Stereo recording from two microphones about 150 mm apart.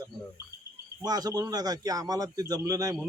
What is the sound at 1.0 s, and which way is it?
A man's voice, 25° right (ahead or behind).